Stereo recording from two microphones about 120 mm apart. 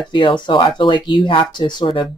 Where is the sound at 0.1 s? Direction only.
45° left (ahead or behind).